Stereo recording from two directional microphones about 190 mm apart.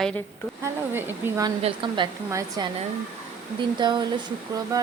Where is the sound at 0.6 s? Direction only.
15° right (ahead or behind).